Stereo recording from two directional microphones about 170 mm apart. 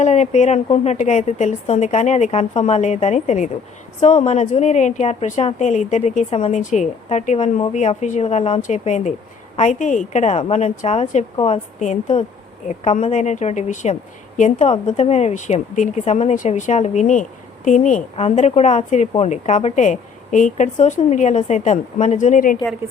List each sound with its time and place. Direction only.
0.0 s a woman's voice: 45° left (ahead or behind)